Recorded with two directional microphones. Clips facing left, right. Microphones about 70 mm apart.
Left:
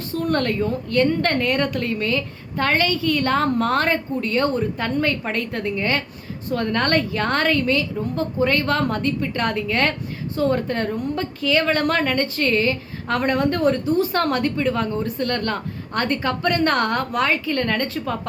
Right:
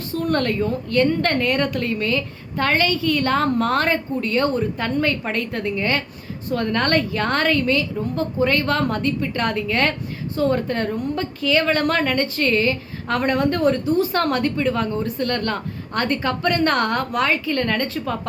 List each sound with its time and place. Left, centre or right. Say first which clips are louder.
0.3 s a woman's voice: right 1 dB; left